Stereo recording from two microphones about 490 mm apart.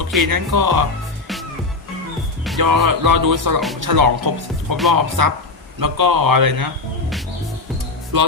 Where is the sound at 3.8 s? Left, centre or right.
Right.